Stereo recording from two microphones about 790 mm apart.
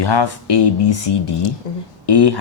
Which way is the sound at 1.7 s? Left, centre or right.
Left.